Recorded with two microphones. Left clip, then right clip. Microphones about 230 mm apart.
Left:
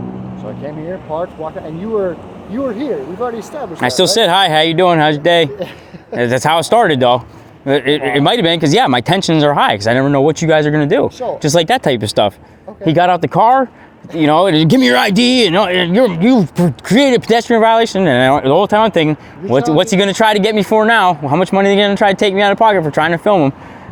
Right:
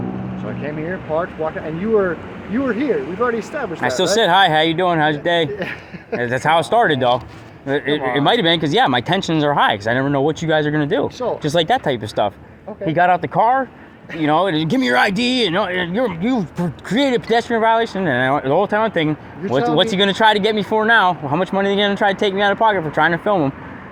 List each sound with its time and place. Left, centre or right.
2.6 s speech: centre
3.8 s speech: left
5.5 s a sound: centre
6.2 s speech: left